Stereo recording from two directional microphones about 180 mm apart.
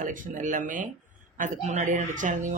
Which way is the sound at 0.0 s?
45° right (ahead or behind).